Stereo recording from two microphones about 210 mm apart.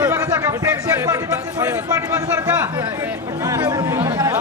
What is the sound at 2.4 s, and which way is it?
Chatter, 10° right (ahead or behind).